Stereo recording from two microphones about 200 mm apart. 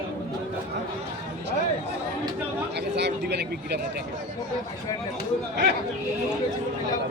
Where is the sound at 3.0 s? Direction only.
55° right (ahead or behind).